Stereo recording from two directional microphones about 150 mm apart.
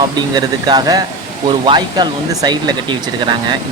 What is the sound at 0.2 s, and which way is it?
Speech, 30° right (ahead or behind).